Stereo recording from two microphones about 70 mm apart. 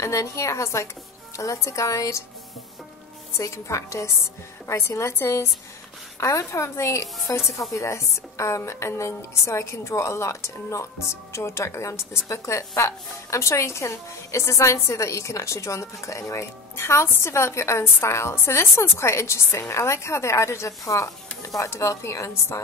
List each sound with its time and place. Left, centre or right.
0.0 s speech: left
3.3 s a woman's voice: left